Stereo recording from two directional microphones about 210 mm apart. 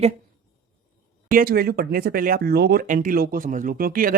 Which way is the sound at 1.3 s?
45° right (ahead or behind).